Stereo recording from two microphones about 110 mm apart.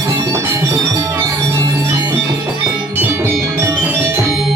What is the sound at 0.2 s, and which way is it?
Music, 30° right (ahead or behind).